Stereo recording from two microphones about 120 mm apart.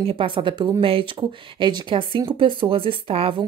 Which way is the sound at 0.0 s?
50° right (ahead or behind).